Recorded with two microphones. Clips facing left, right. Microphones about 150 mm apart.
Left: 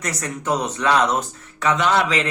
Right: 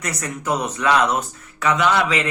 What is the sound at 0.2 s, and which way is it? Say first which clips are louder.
Speech: even; 35° left (ahead or behind).